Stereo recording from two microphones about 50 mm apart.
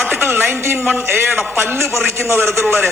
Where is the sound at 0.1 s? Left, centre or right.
Right.